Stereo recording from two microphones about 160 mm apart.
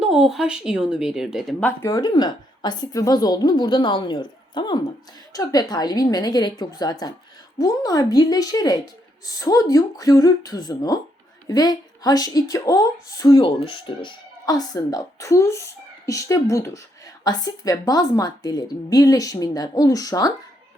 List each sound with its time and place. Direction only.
0.0 s speech: 5° right (ahead or behind)
1.6 s a woman's voice: 20° left (ahead or behind)
13.6 s a woman's voice: 30° left (ahead or behind)